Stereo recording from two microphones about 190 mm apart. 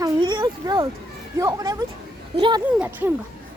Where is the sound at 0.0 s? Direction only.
25° right (ahead or behind).